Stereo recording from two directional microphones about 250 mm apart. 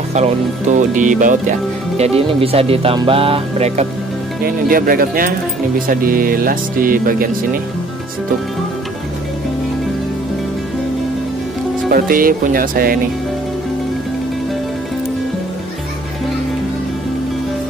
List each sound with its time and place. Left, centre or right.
0.1 s speech: right
4.6 s speech: right
11.9 s speech: right